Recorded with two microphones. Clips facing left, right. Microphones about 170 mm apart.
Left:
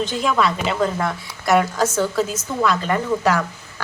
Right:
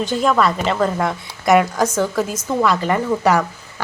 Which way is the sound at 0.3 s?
Centre (ahead or behind).